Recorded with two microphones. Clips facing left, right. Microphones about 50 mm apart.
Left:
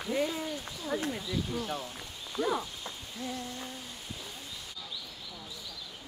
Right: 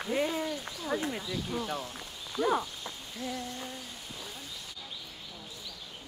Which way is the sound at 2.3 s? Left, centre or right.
Centre.